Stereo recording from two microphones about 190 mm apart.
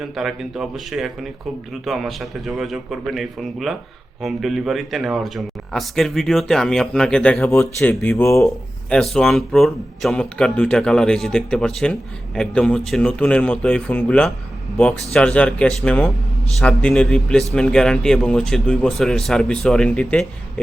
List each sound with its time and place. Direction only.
0.0 s speech: centre (ahead or behind); by 8.4 s 15° left (ahead or behind)
8.9 s speech: 5° left (ahead or behind)